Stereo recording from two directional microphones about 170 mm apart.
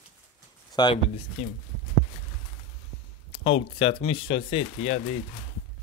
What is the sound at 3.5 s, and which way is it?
Speech, 35° left (ahead or behind).